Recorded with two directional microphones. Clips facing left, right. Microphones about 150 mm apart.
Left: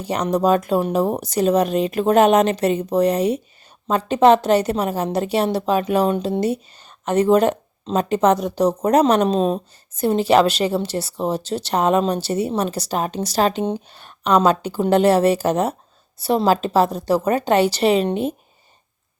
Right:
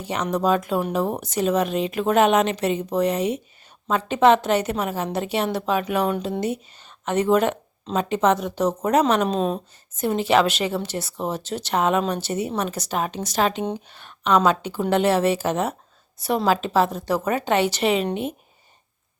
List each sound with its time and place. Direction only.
0.0 s speech: 40° left (ahead or behind)